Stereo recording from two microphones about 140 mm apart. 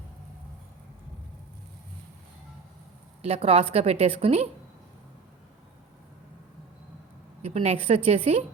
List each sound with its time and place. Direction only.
3.2 s a woman's voice: 45° right (ahead or behind)
7.4 s a woman's voice: 45° right (ahead or behind)